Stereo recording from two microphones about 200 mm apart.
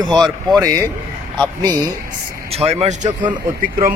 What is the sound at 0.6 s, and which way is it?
Speech, 15° right (ahead or behind).